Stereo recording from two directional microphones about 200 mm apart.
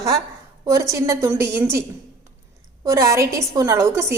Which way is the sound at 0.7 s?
15° right (ahead or behind).